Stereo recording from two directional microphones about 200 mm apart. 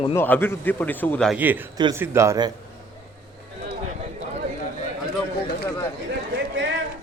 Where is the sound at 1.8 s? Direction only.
20° right (ahead or behind).